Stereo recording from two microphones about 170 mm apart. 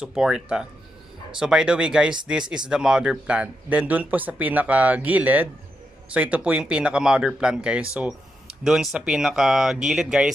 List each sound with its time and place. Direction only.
0.0 s a man's voice: 5° right (ahead or behind)